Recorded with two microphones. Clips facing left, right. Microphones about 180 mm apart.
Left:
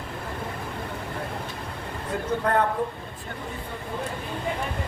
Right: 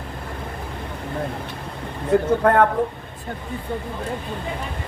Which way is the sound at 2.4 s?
55° right (ahead or behind).